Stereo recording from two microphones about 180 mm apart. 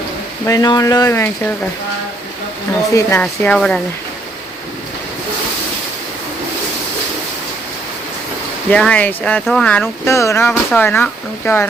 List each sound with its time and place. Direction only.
0.4 s speech: 20° left (ahead or behind)
2.9 s speech: 10° left (ahead or behind)
8.7 s speech: 5° left (ahead or behind)